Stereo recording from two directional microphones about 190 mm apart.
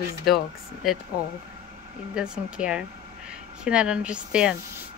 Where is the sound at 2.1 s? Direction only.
5° right (ahead or behind).